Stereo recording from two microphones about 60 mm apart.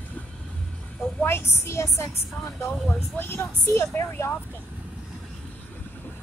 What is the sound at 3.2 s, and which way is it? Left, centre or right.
A woman's voice, left.